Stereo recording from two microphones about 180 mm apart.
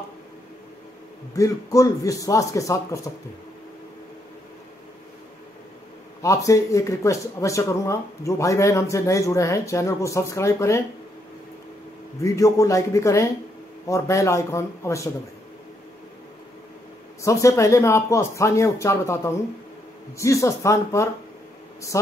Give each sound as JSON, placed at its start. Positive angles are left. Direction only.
{"t": 1.3, "sound": "speech", "side_deg": 20}
{"t": 6.2, "sound": "speech", "side_deg": 15}
{"t": 12.2, "sound": "speech", "side_deg": 20}
{"t": 17.2, "sound": "speech", "side_deg": 15}